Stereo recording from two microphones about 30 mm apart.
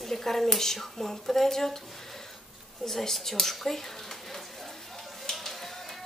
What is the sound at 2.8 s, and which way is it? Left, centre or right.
Speech, centre.